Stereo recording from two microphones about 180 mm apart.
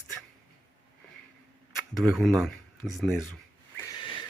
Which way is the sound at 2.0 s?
Centre (ahead or behind).